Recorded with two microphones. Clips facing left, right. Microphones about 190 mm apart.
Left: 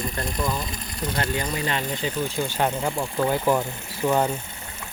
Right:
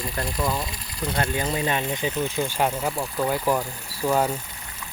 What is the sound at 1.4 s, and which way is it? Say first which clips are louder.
Speech: right 2 dB; 25° right (ahead or behind).